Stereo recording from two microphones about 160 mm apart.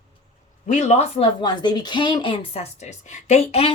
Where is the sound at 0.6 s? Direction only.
50° left (ahead or behind).